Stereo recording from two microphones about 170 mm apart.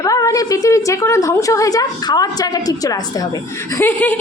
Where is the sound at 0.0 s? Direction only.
20° left (ahead or behind).